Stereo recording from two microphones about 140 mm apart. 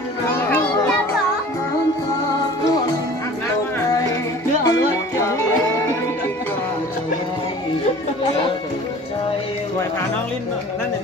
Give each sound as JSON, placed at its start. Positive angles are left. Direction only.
{"t": 0.3, "sound": "children playing", "side_deg": 10}
{"t": 4.6, "sound": "music", "side_deg": 20}